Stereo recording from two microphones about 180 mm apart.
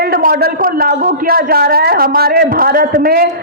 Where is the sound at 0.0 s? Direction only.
55° right (ahead or behind).